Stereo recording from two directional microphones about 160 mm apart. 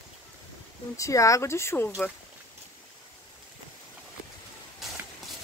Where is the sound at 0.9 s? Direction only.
20° left (ahead or behind).